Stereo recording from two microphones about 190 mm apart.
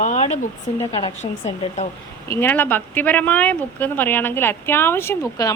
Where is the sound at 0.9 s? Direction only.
30° left (ahead or behind).